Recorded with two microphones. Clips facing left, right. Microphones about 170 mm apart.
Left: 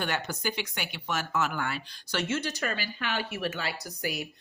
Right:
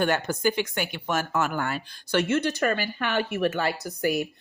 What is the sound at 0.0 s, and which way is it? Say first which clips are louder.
Speech: right 8 dB; 50° right (ahead or behind).